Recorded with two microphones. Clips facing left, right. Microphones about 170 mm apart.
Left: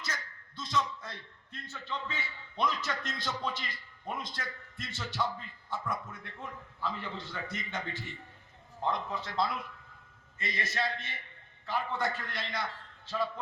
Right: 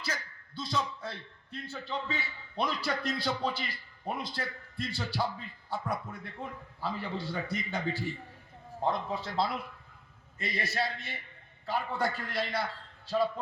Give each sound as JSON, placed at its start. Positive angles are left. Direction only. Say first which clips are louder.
{"t": 0.0, "sound": "a man's voice", "louder": "right 3 dB", "side_deg": -30}